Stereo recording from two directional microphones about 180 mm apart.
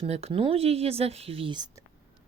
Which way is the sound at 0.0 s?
35° right (ahead or behind).